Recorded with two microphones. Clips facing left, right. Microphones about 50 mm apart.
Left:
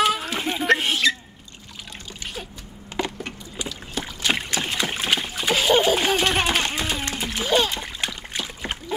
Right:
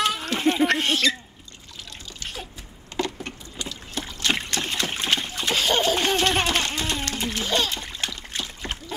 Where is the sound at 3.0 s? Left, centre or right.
Centre.